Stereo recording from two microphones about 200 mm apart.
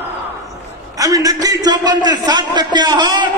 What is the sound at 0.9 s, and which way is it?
A man's voice, 15° right (ahead or behind).